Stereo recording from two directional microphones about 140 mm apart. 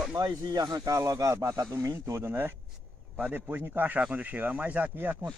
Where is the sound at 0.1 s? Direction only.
30° right (ahead or behind).